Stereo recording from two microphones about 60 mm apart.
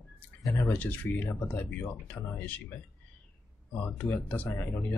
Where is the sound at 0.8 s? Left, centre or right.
Left.